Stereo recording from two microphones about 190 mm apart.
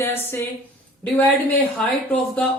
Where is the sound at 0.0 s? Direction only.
15° left (ahead or behind).